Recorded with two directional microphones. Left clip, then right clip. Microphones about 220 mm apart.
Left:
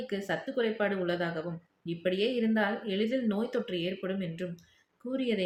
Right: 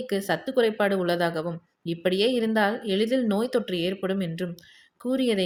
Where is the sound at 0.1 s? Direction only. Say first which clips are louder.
Right 8 dB; 45° right (ahead or behind).